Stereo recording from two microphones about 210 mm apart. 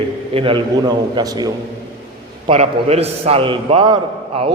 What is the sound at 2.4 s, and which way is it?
A man's voice, 30° right (ahead or behind).